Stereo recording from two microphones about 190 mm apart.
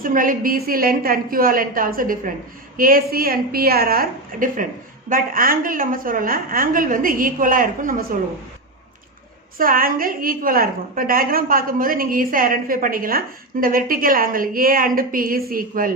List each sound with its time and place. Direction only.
0.0 s a woman's voice: 45° right (ahead or behind)
9.6 s a woman's voice: 50° right (ahead or behind)